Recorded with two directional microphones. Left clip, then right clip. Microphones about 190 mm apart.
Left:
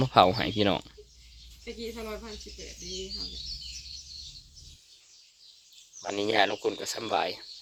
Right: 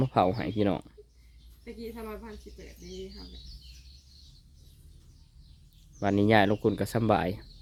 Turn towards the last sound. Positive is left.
turn(degrees=-10)  # may be behind; listen again after turning